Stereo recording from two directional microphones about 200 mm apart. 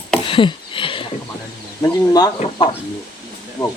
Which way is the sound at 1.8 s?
20° left (ahead or behind).